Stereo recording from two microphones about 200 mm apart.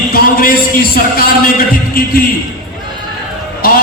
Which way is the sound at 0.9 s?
45° left (ahead or behind).